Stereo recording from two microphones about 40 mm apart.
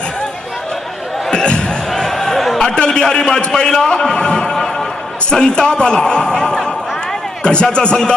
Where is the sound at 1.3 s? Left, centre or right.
Left.